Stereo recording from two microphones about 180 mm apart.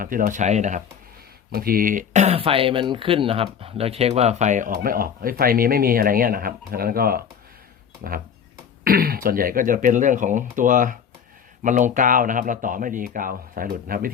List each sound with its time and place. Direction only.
0.0 s speech: 50° right (ahead or behind)
1.5 s speech: 55° right (ahead or behind)